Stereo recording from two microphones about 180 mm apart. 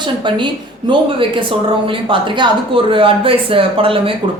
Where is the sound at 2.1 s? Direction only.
30° right (ahead or behind).